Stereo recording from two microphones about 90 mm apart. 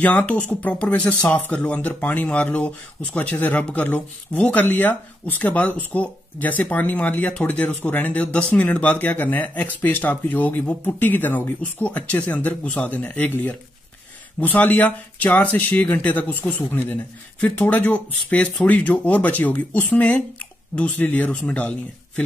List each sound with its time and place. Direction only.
0.0 s speech: 20° left (ahead or behind)